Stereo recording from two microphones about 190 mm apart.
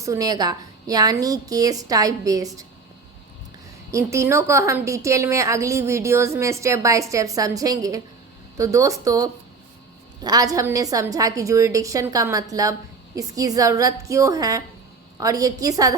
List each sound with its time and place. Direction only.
0.0 s a woman's voice: 15° right (ahead or behind)
3.9 s a woman's voice: 15° right (ahead or behind)